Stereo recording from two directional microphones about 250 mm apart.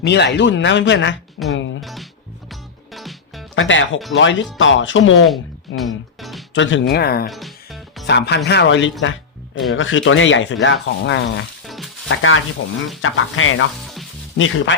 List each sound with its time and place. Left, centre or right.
0.0 s speech: left
1.5 s music: left
1.8 s music: centre
3.5 s speech: left
5.3 s music: centre
6.5 s speech: left
7.3 s music: centre
8.0 s speech: left
11.6 s music: centre
12.0 s speech: left
13.8 s music: centre
14.3 s speech: left